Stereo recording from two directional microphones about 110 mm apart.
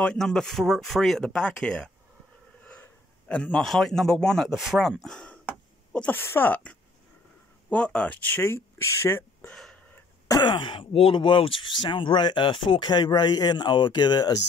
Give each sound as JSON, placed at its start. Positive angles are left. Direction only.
{"t": 0.0, "sound": "a man's voice", "side_deg": 5}
{"t": 9.5, "sound": "a sound", "side_deg": 5}
{"t": 10.4, "sound": "speech", "side_deg": 45}